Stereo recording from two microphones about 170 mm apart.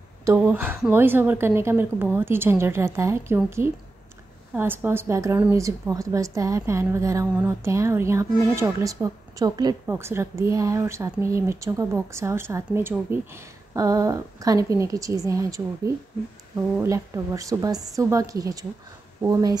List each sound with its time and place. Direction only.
0.2 s a woman's voice: 10° right (ahead or behind)